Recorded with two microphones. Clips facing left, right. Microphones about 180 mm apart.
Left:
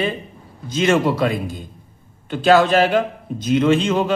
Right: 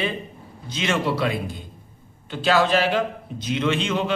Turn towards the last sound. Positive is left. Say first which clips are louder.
# left 6 dB
turn(degrees=40)  # may be behind; listen again after turning